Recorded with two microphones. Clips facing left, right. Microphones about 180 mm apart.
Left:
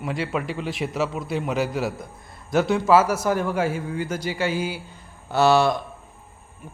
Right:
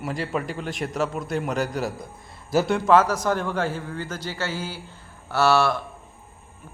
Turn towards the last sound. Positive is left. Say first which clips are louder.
# left 2 dB
turn(degrees=15)  # may be behind; listen again after turning